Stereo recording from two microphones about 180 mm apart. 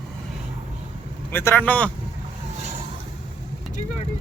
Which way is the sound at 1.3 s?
10° left (ahead or behind).